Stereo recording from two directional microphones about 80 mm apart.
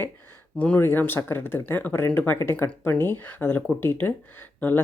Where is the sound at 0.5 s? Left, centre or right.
Centre.